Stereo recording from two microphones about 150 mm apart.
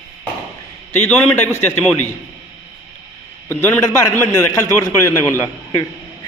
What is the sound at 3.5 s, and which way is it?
A man's voice, 15° left (ahead or behind).